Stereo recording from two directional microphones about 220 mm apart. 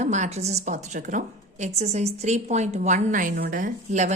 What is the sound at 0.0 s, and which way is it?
A woman's voice, 30° right (ahead or behind).